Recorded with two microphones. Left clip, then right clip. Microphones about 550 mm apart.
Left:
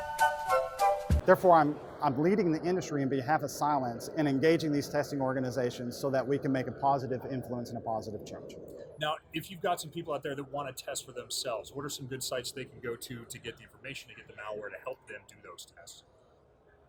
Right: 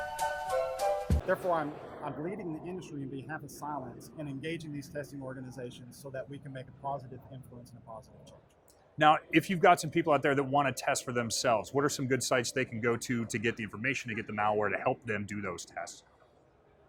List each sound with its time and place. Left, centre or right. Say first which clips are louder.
0.2 s music: left 5 dB; centre
1.3 s speech: left 9 dB; left
9.0 s speech: right 10 dB; right
9.4 s speech: right 9 dB; right
11.4 s speech: right 12 dB; right